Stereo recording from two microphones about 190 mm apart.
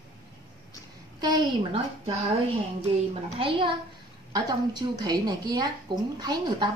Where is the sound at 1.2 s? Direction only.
20° right (ahead or behind).